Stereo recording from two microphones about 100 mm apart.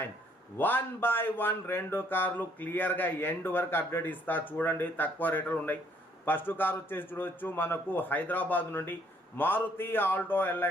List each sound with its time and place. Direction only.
0.6 s speech: 20° left (ahead or behind)